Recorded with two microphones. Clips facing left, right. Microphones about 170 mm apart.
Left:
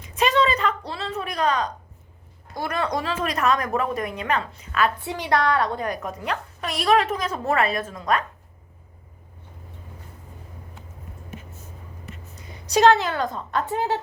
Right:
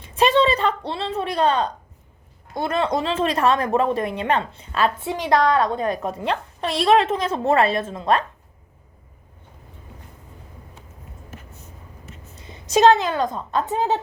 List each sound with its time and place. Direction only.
0.0 s a sound: 30° right (ahead or behind)
2.6 s a woman's voice: 25° right (ahead or behind)
12.4 s a woman's voice: 25° right (ahead or behind)